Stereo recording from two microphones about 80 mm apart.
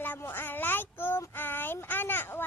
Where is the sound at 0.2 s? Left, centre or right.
Left.